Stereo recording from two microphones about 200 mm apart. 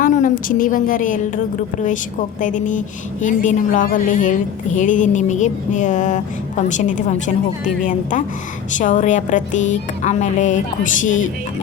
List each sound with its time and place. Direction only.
0.0 s a woman's voice: 40° left (ahead or behind)
2.4 s a woman's voice: 40° left (ahead or behind)